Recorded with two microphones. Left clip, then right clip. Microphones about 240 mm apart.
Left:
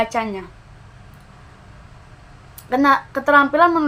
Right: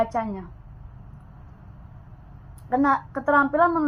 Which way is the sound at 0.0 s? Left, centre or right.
Centre.